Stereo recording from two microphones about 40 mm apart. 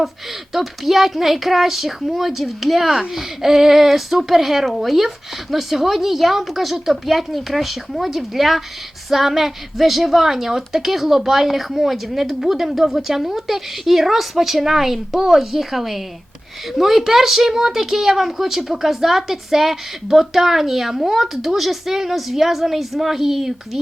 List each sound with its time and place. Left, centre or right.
0.5 s a woman's voice: centre